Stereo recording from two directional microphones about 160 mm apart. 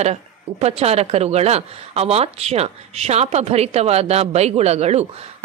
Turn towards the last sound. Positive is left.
turn(degrees=-40)  # may be behind; listen again after turning